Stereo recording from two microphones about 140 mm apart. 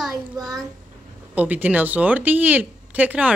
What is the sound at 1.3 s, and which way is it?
Speech, 10° right (ahead or behind).